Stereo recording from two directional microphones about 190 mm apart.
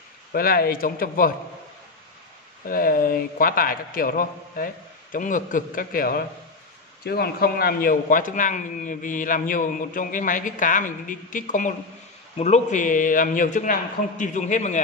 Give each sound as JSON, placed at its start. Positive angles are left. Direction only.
{"t": 0.3, "sound": "a man's voice", "side_deg": 50}
{"t": 2.6, "sound": "a man's voice", "side_deg": 50}